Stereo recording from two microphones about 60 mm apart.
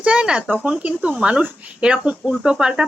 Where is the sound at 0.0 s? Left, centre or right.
Centre.